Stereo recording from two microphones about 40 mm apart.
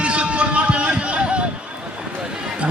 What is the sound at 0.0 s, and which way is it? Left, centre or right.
Music, right.